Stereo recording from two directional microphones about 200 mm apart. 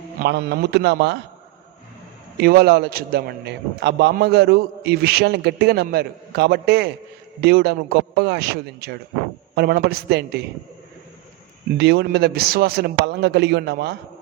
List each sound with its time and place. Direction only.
0.2 s a man's voice: 55° right (ahead or behind)
2.4 s a man's voice: 50° right (ahead or behind)
11.8 s a man's voice: 55° right (ahead or behind)